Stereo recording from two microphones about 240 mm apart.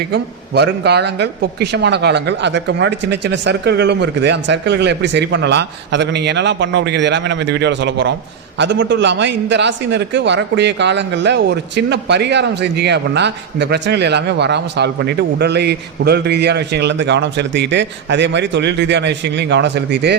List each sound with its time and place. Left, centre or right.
0.1 s a man's voice: right